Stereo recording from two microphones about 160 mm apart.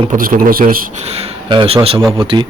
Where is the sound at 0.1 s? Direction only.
60° right (ahead or behind).